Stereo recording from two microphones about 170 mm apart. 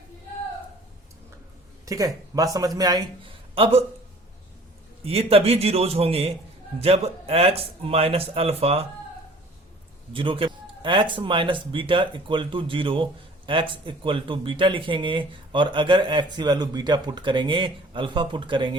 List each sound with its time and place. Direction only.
1.8 s a man's voice: 20° right (ahead or behind)
3.5 s speech: 35° right (ahead or behind)
5.0 s speech: 35° right (ahead or behind)
10.1 s a man's voice: 30° right (ahead or behind)